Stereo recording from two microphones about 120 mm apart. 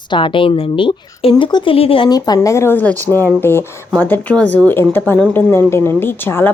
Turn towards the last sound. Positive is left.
turn(degrees=20)  # may be behind; listen again after turning